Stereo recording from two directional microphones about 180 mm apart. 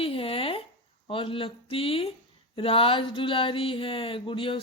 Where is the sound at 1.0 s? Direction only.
30° left (ahead or behind).